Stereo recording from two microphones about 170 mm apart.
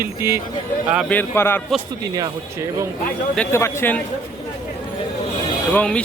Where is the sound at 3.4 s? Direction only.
15° left (ahead or behind).